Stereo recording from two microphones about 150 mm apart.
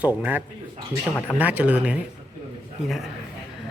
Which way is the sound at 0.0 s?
10° right (ahead or behind).